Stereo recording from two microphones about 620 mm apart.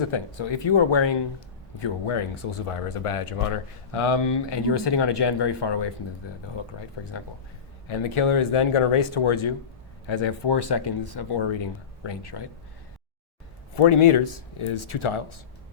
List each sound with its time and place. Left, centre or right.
0.1 s speech: left
7.9 s speech: left
13.7 s a man's voice: left